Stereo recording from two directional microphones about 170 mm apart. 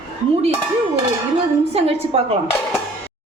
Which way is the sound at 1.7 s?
35° right (ahead or behind).